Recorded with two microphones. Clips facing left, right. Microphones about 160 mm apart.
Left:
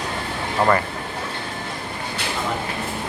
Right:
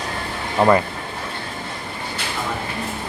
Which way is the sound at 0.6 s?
20° right (ahead or behind).